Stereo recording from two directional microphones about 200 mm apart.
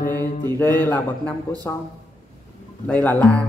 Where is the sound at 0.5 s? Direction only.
10° left (ahead or behind).